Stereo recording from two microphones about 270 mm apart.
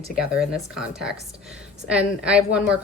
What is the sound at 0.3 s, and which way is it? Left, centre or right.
A woman's voice, centre.